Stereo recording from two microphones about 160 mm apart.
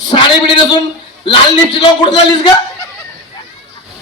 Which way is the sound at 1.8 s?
30° left (ahead or behind).